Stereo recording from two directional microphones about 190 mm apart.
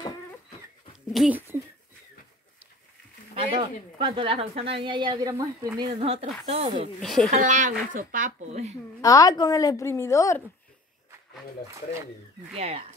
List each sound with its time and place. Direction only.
1.1 s speech: 5° right (ahead or behind)
3.3 s speech: 25° right (ahead or behind)
5.9 s speech: 35° right (ahead or behind)
7.0 s speech: centre (ahead or behind)
7.2 s speech: 40° right (ahead or behind)
9.0 s a woman's voice: 20° left (ahead or behind)
11.6 s speech: 15° right (ahead or behind)
12.5 s speech: 30° right (ahead or behind)